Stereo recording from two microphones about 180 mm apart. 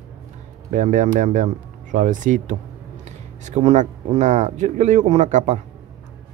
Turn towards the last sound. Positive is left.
turn(degrees=-45)  # may be behind; listen again after turning